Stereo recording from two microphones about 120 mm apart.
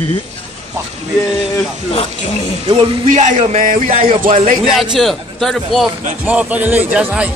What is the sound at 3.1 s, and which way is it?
Music, 90° right.